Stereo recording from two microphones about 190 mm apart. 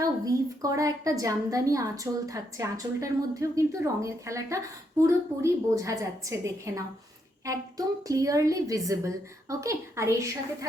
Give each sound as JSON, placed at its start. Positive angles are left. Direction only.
{"t": 0.0, "sound": "a woman's voice", "side_deg": -15}